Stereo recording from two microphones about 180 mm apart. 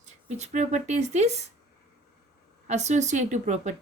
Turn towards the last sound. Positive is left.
turn(degrees=-40)  # may be behind; listen again after turning